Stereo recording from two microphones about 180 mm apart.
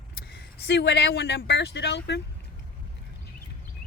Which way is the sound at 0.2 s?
65° left (ahead or behind).